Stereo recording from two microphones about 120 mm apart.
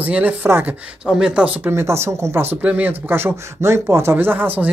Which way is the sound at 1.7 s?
20° right (ahead or behind).